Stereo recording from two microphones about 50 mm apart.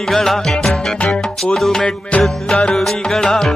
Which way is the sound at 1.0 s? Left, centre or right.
Left.